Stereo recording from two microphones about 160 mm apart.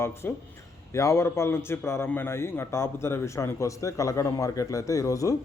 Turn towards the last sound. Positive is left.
turn(degrees=20)  # may be behind; listen again after turning